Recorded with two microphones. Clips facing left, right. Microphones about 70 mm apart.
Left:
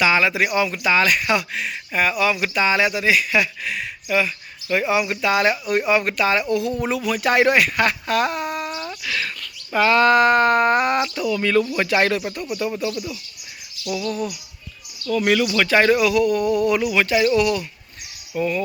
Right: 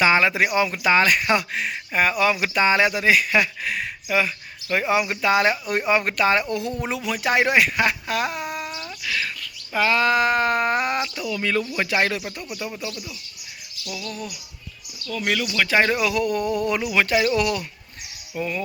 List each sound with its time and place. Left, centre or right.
0.0 s speech: right
6.8 s speech: centre
14.0 s bird: left
15.1 s speech: centre
15.6 s speech: centre
16.1 s speech: right
18.3 s speech: centre